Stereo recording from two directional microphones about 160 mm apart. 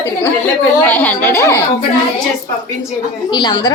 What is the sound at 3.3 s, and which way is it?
Speech, 30° left (ahead or behind).